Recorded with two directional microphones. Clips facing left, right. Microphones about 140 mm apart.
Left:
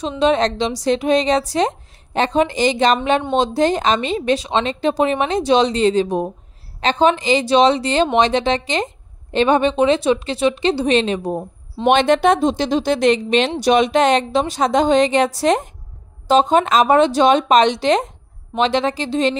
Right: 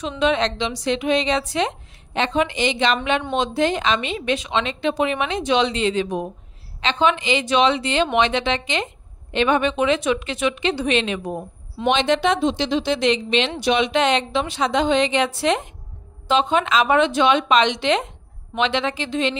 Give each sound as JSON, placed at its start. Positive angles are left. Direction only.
{"t": 0.2, "sound": "a woman's voice", "side_deg": 40}
{"t": 11.9, "sound": "a woman's voice", "side_deg": 50}